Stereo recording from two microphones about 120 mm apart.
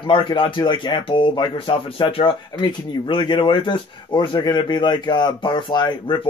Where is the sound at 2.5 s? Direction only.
35° left (ahead or behind).